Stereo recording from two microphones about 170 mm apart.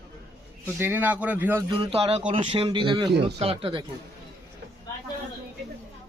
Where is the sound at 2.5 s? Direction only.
30° right (ahead or behind).